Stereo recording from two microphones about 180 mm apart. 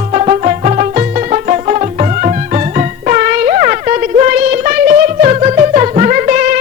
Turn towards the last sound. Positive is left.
turn(degrees=-45)  # may be behind; listen again after turning